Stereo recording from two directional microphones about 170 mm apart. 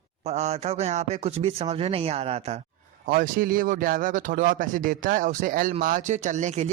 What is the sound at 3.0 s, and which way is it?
Speech, 55° right (ahead or behind).